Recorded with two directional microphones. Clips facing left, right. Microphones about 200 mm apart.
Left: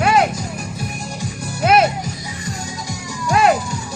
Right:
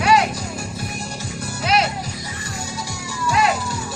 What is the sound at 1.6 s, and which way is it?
Music, 50° left (ahead or behind).